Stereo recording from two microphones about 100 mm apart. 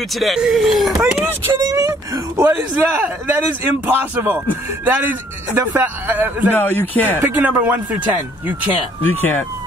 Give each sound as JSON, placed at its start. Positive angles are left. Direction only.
{"t": 0.1, "sound": "speech", "side_deg": 0}
{"t": 1.5, "sound": "a man's voice", "side_deg": -30}
{"t": 6.5, "sound": "speech", "side_deg": 20}
{"t": 7.2, "sound": "a man's voice", "side_deg": -20}
{"t": 9.0, "sound": "speech", "side_deg": 20}